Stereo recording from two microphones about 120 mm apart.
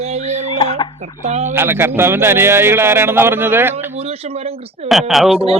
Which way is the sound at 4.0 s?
60° right (ahead or behind).